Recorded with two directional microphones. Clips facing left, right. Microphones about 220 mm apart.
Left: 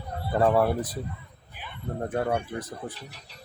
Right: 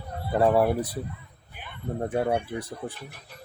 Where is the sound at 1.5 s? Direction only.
50° right (ahead or behind).